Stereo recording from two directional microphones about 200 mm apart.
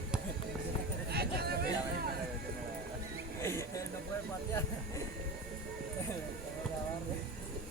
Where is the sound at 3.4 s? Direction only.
15° left (ahead or behind).